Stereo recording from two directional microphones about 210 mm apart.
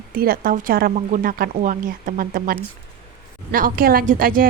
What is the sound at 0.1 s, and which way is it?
A woman's voice, 45° right (ahead or behind).